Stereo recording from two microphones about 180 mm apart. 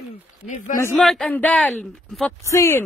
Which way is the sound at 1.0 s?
Centre (ahead or behind).